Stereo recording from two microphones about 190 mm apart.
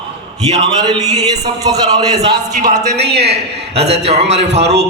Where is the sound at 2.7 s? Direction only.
35° right (ahead or behind).